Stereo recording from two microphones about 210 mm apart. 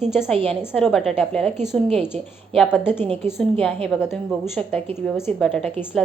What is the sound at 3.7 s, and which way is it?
Speech, 25° right (ahead or behind).